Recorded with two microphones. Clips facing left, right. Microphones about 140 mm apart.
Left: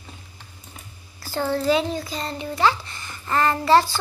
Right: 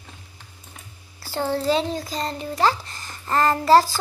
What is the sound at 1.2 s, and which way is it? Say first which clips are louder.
A child's voice: left 1 dB; 30° right (ahead or behind).